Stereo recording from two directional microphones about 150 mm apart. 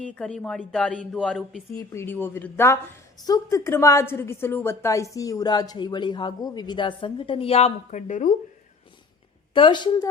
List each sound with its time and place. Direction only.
0.1 s a woman's voice: 5° left (ahead or behind); by 8.3 s 55° left (ahead or behind)
9.6 s speech: 30° left (ahead or behind)